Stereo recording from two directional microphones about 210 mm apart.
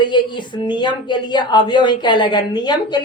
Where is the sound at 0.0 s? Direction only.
20° left (ahead or behind).